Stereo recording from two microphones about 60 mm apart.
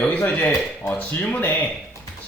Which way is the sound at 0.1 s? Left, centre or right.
Left.